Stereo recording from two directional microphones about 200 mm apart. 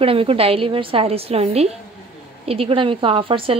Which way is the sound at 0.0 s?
30° right (ahead or behind).